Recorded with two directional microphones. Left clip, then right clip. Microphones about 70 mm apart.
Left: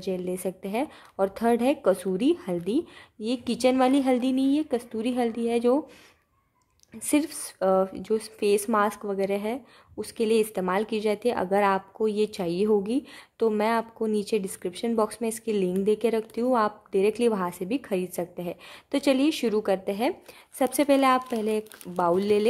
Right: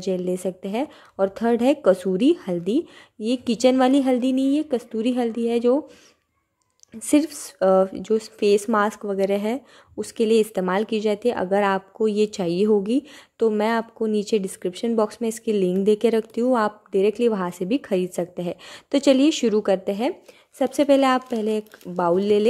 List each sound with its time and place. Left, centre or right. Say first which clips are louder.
0.0 s speech: right 5 dB; right
1.6 s a woman's voice: right 5 dB; right
7.0 s speech: right 5 dB; right
9.2 s a woman's voice: right 6 dB; right
20.5 s a woman's voice: right 4 dB; right
21.0 s speech: right 2 dB; right